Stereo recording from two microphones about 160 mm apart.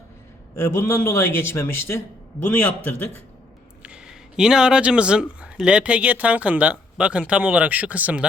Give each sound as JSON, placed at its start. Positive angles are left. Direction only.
{"t": 0.5, "sound": "a man's voice", "side_deg": 15}
{"t": 3.8, "sound": "speech", "side_deg": -5}